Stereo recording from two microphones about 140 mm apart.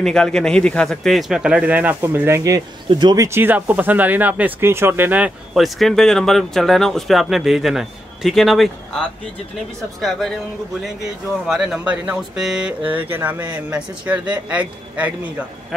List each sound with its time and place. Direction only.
0.0 s speech: 5° left (ahead or behind); by 3.3 s 30° right (ahead or behind)
3.3 s speech: 15° right (ahead or behind)